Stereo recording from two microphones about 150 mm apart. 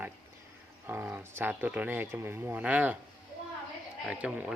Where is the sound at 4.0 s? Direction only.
5° right (ahead or behind).